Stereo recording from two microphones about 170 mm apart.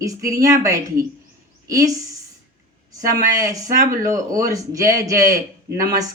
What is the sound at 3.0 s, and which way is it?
Speech, 20° right (ahead or behind).